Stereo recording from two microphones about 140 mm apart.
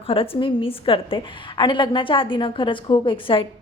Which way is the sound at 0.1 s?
40° left (ahead or behind).